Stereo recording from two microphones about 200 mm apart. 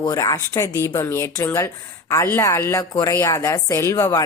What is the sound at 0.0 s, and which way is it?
A woman's voice, 20° left (ahead or behind).